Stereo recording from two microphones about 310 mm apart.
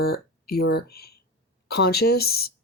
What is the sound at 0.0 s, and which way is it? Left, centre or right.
Speech, left.